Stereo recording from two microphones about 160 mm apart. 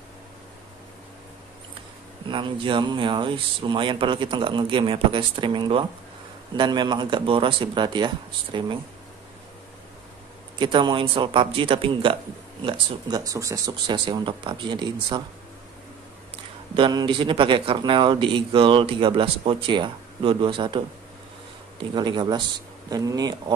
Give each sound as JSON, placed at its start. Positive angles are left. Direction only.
{"t": 2.2, "sound": "speech", "side_deg": -30}
{"t": 10.6, "sound": "speech", "side_deg": -30}
{"t": 12.6, "sound": "speech", "side_deg": -25}
{"t": 16.7, "sound": "speech", "side_deg": -30}